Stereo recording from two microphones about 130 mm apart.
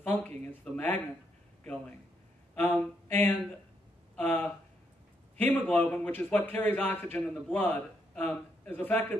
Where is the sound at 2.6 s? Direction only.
15° left (ahead or behind).